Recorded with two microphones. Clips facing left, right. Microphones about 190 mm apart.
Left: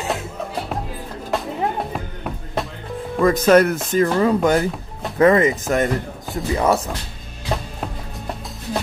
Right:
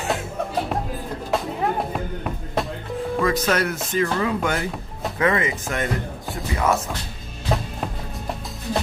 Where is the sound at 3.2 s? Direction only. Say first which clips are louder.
Left 9 dB; 50° left (ahead or behind).